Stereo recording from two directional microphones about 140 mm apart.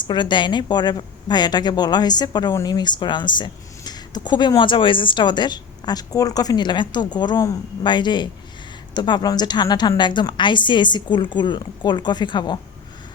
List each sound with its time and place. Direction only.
0.0 s a woman's voice: 35° left (ahead or behind)